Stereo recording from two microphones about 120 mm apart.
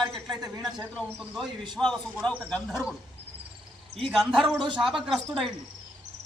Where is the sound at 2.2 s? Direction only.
5° left (ahead or behind).